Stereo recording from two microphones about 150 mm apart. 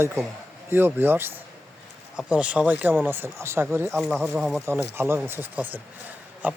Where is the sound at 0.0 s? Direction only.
15° right (ahead or behind).